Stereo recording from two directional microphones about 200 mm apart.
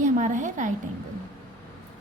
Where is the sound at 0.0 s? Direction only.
40° right (ahead or behind).